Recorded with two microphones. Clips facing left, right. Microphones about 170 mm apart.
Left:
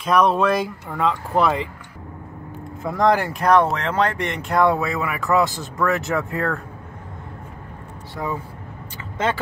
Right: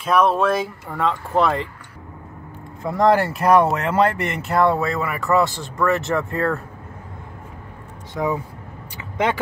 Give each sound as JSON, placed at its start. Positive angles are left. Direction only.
{"t": 0.0, "sound": "speech", "side_deg": 0}
{"t": 2.8, "sound": "speech", "side_deg": 0}
{"t": 8.1, "sound": "speech", "side_deg": -20}